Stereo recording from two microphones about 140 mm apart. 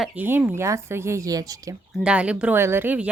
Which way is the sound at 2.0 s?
10° right (ahead or behind).